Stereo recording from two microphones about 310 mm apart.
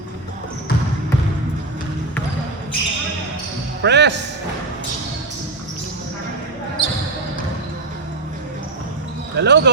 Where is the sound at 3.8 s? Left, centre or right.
Right.